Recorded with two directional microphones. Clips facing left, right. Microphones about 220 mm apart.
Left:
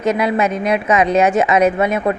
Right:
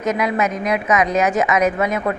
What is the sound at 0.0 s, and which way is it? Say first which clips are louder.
A woman's voice: left 3 dB; 30° left (ahead or behind).